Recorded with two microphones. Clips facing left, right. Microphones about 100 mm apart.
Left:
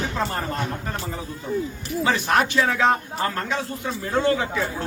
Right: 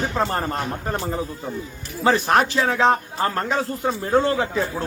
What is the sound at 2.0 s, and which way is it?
Speech, 40° right (ahead or behind).